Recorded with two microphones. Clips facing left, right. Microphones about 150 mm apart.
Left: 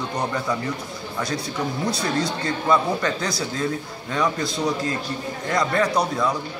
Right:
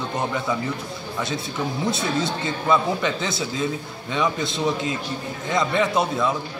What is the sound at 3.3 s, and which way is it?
Speech, 25° right (ahead or behind).